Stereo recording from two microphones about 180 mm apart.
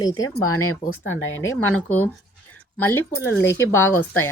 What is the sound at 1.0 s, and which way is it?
Speech, 90° left.